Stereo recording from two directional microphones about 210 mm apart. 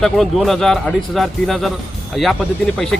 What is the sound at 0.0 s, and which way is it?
Speech, centre (ahead or behind).